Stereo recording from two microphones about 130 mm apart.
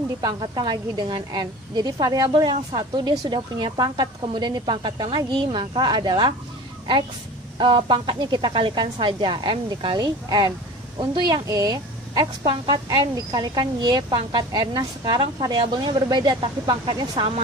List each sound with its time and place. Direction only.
0.2 s a woman's voice: 35° right (ahead or behind)
7.5 s a woman's voice: 40° right (ahead or behind)